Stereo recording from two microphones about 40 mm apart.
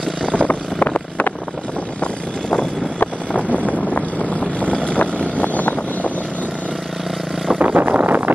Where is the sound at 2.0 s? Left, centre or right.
Left.